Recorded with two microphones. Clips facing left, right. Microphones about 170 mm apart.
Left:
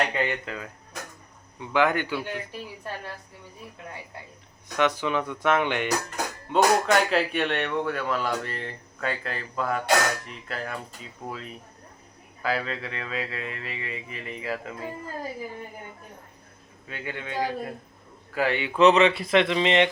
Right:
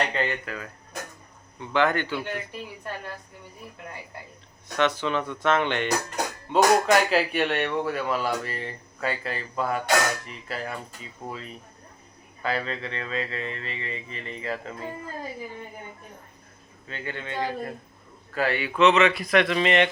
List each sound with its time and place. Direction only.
0.0 s speech: 10° left (ahead or behind)
4.8 s speech: 15° left (ahead or behind)
6.5 s speech: centre (ahead or behind)
12.4 s speech: 5° left (ahead or behind)
16.9 s speech: 10° left (ahead or behind)
18.8 s speech: 35° left (ahead or behind); by 19.9 s 20° left (ahead or behind)